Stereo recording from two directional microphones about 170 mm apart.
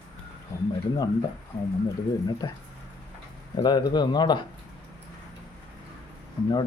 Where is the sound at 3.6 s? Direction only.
25° left (ahead or behind).